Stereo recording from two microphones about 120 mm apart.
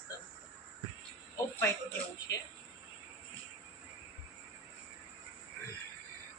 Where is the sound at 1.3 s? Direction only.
25° left (ahead or behind).